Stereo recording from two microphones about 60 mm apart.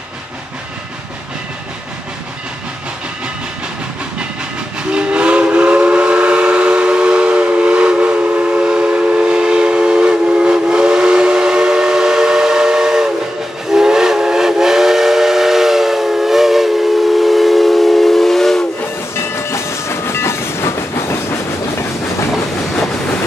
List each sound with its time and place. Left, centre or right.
4.9 s train: centre
13.7 s steam whistle: centre
19.1 s train: left